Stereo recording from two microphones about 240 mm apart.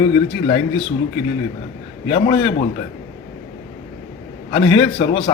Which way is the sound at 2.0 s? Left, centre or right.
Centre.